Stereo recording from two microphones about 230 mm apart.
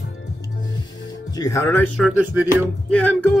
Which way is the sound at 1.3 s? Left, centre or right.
Centre.